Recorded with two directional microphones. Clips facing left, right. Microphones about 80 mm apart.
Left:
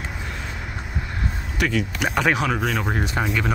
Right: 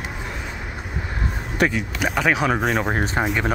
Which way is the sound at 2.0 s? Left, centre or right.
Centre.